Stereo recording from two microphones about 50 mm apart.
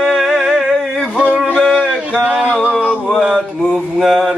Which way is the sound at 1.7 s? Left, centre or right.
Centre.